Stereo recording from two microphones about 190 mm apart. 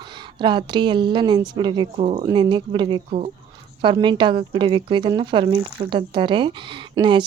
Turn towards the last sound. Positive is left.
turn(degrees=-25)  # may be behind; listen again after turning